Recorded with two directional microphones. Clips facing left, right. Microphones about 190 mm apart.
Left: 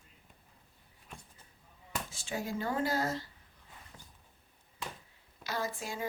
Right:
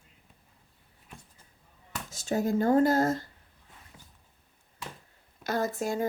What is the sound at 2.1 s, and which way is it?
Speech, 40° right (ahead or behind).